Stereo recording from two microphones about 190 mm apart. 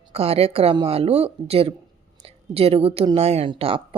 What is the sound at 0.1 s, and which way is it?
A woman's voice, 30° right (ahead or behind).